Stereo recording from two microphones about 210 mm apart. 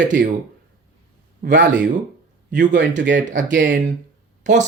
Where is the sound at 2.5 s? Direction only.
45° right (ahead or behind).